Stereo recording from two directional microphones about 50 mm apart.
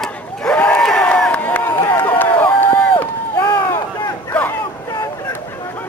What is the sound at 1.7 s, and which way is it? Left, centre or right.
Crowd, left.